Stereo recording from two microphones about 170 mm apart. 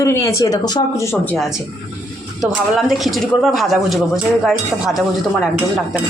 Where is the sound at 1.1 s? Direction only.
10° left (ahead or behind).